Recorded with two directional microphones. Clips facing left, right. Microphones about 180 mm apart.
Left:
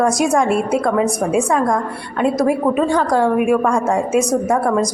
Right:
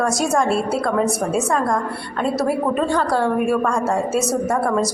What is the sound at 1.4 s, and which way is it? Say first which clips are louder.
Speech: left 3 dB; centre (ahead or behind).